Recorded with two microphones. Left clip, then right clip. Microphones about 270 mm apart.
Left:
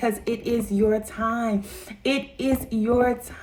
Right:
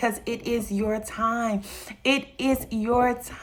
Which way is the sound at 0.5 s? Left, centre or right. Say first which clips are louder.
Left 5 dB; centre.